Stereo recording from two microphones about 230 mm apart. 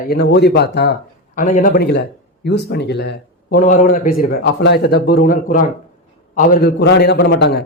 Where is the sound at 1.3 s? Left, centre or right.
Left.